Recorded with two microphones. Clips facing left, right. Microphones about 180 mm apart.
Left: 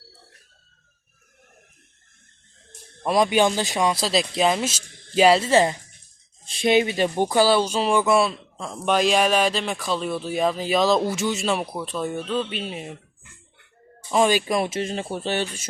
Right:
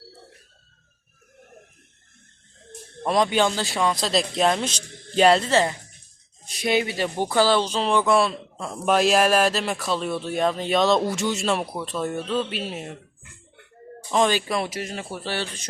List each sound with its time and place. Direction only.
3.0 s speech: 5° left (ahead or behind)
3.2 s speech: 15° left (ahead or behind)
14.1 s speech: 10° left (ahead or behind)